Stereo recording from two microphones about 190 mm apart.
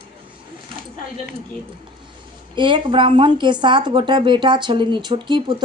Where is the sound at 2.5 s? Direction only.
25° right (ahead or behind).